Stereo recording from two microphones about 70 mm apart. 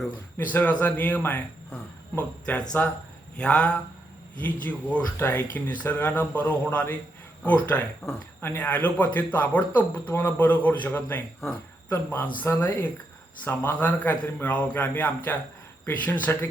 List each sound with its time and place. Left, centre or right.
0.3 s speech: left
8.4 s speech: left